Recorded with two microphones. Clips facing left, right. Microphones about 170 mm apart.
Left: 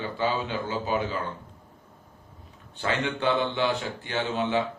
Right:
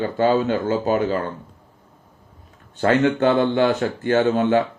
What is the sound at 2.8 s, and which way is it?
Speech, 50° right (ahead or behind).